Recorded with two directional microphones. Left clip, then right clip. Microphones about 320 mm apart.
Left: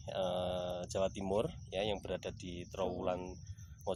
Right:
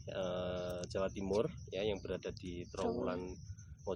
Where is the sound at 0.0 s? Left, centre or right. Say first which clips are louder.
Left 3 dB; left.